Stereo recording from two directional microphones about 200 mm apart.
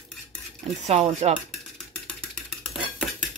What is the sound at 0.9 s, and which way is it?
Speech, 30° right (ahead or behind).